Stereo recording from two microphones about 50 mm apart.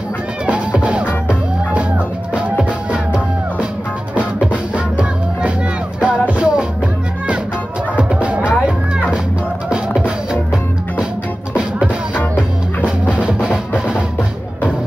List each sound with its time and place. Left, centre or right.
0.5 s music: right
4.7 s music: right
7.9 s music: right
9.7 s music: right
12.8 s music: centre